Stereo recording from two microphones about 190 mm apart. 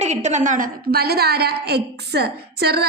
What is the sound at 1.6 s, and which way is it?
A woman's voice, 60° right (ahead or behind).